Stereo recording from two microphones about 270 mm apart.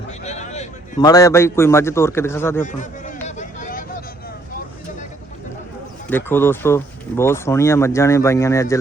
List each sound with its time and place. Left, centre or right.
0.3 s a sound: left
1.0 s speech: centre
3.2 s vehicle: left
6.1 s speech: centre